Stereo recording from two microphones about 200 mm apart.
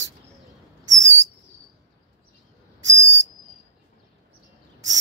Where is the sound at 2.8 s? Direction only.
65° right (ahead or behind).